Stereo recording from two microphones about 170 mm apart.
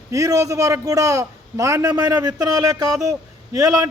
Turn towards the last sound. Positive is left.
turn(degrees=-20)  # may be behind; listen again after turning